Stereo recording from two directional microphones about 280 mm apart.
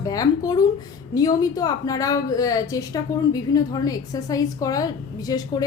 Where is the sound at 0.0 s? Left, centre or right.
Centre.